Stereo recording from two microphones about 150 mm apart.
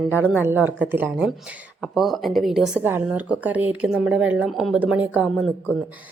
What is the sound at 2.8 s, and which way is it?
A woman's voice, 15° right (ahead or behind).